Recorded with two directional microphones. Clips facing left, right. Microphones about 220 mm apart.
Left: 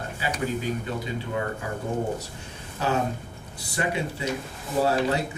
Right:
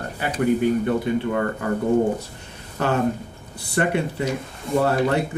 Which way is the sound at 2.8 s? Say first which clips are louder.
Right 5 dB; 60° right (ahead or behind).